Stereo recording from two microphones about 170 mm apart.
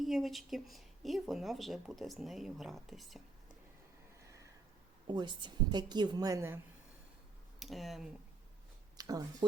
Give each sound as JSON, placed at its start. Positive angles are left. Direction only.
{"t": 0.0, "sound": "speech", "side_deg": 0}
{"t": 5.0, "sound": "a woman's voice", "side_deg": -25}
{"t": 7.6, "sound": "speech", "side_deg": 0}
{"t": 9.0, "sound": "speech", "side_deg": -20}